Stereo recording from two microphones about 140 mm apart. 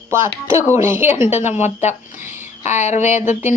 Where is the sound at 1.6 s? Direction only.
55° left (ahead or behind).